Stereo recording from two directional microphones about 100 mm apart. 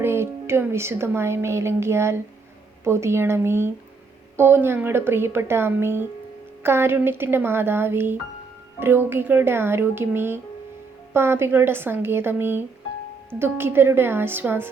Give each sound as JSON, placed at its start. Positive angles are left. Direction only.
{"t": 0.0, "sound": "a woman's voice", "side_deg": -25}